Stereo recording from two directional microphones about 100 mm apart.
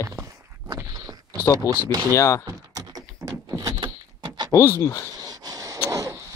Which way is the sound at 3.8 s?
45° right (ahead or behind).